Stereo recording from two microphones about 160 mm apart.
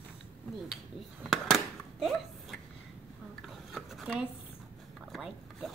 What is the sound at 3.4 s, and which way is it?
Rub, centre (ahead or behind).